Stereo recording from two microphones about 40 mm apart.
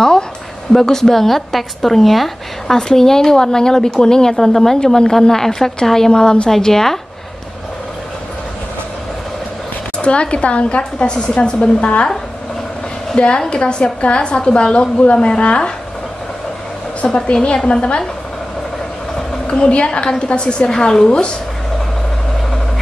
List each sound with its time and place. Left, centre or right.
0.8 s speech: centre
2.9 s speech: centre
9.9 s a woman's voice: left
13.1 s a woman's voice: left
17.0 s a woman's voice: left
19.7 s a woman's voice: left